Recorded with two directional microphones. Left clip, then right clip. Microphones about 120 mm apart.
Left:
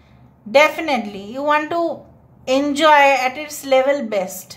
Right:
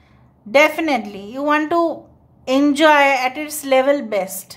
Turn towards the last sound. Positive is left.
turn(degrees=-35)  # may be behind; listen again after turning